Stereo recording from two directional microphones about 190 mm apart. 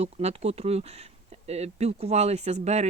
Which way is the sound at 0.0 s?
35° right (ahead or behind).